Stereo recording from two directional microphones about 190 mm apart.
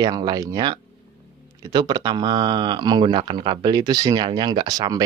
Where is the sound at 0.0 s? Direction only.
20° right (ahead or behind).